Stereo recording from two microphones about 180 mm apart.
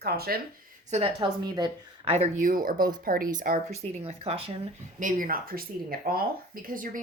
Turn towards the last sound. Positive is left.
turn(degrees=-50)  # may be behind; listen again after turning